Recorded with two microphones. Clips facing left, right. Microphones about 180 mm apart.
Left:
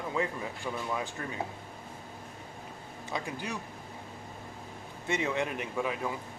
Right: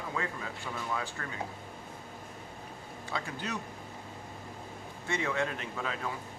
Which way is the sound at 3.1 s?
10° left (ahead or behind).